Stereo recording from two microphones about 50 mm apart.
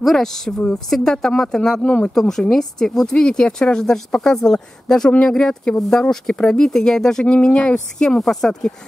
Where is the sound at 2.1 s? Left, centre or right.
Centre.